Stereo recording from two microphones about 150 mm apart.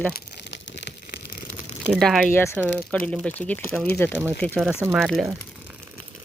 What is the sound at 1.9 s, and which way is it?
Speech, centre (ahead or behind).